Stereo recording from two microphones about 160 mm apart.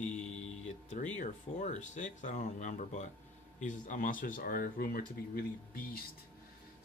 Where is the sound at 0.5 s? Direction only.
50° left (ahead or behind).